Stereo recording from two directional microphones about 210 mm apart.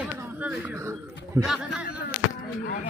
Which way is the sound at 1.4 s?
20° right (ahead or behind).